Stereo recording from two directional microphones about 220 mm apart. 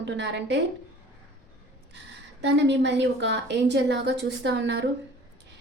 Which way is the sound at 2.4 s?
50° right (ahead or behind).